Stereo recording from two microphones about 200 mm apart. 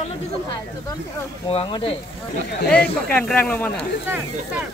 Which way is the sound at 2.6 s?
5° left (ahead or behind).